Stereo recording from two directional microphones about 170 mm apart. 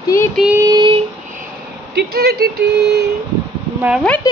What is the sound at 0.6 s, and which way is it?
Speech, 25° right (ahead or behind).